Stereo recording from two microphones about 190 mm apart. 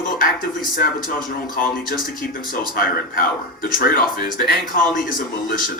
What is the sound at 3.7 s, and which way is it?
Speech, 50° left (ahead or behind).